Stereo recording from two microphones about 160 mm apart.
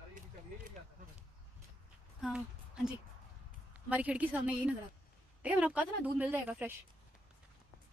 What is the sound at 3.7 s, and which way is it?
A woman's voice, 10° right (ahead or behind).